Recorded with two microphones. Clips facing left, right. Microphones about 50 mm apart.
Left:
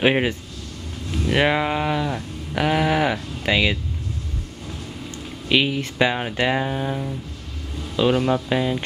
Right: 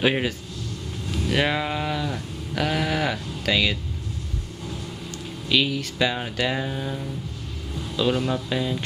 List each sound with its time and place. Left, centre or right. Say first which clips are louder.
0.0 s speech: left 4 dB; left
5.5 s speech: left 3 dB; left